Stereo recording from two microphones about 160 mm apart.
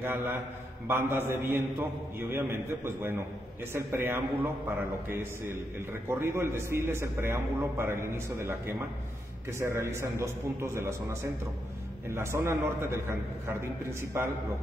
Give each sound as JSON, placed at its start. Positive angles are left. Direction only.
{"t": 0.0, "sound": "a man's voice", "side_deg": -15}